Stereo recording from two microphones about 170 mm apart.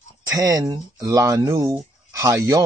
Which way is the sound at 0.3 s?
20° right (ahead or behind).